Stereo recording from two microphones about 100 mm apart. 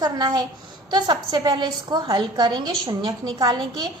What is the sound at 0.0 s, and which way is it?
A woman's voice, 45° right (ahead or behind).